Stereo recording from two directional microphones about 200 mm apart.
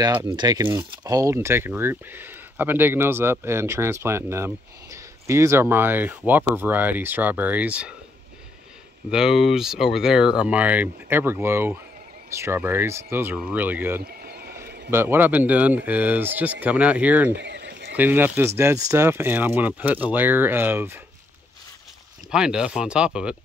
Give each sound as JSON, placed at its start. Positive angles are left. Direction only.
{"t": 0.0, "sound": "speech", "side_deg": -20}
{"t": 9.1, "sound": "speech", "side_deg": 0}
{"t": 14.0, "sound": "a sound", "side_deg": -50}
{"t": 14.9, "sound": "speech", "side_deg": -10}
{"t": 17.4, "sound": "a sound", "side_deg": -60}
{"t": 17.9, "sound": "speech", "side_deg": -10}
{"t": 22.3, "sound": "speech", "side_deg": -5}